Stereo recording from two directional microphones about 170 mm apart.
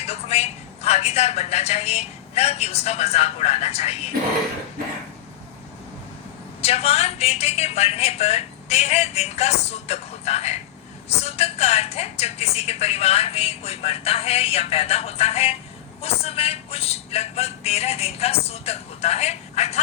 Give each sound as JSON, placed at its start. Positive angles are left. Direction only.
{"t": 0.0, "sound": "a woman's voice", "side_deg": 35}
{"t": 6.6, "sound": "a woman's voice", "side_deg": 35}